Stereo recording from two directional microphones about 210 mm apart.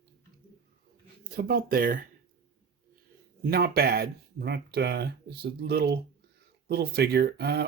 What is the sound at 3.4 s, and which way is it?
Speech, 45° right (ahead or behind).